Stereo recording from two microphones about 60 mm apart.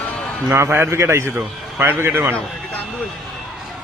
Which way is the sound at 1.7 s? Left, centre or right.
Right.